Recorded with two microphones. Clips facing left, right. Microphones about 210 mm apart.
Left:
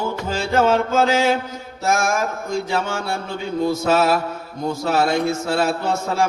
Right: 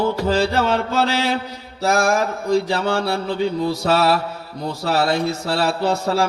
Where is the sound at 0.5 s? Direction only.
45° left (ahead or behind).